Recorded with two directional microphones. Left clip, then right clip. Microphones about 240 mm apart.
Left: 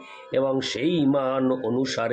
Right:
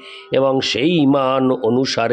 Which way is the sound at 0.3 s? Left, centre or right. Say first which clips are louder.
Right 8 dB; right.